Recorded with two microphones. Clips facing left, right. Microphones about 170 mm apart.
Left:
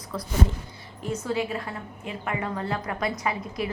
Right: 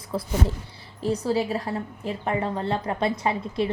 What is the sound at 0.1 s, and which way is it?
A woman's voice, 30° right (ahead or behind).